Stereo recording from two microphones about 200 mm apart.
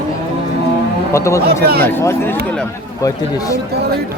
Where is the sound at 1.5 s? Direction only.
50° right (ahead or behind).